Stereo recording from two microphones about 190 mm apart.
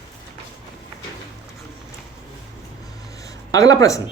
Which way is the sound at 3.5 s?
15° left (ahead or behind).